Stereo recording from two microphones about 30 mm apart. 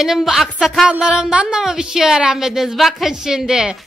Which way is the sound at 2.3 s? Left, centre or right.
Centre.